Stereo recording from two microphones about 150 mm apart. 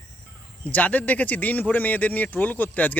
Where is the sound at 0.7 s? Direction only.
10° left (ahead or behind).